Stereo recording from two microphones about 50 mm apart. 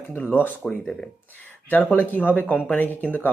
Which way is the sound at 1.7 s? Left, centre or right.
Left.